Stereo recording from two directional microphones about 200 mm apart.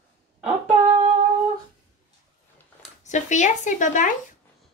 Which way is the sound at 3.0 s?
35° left (ahead or behind).